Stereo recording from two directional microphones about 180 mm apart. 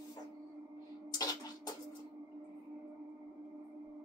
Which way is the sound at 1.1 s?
20° left (ahead or behind).